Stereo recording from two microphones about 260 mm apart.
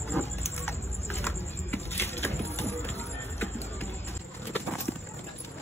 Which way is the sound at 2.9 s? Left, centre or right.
Left.